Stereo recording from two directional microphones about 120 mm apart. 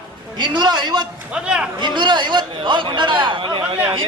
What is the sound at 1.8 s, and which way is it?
A man's voice, 40° right (ahead or behind).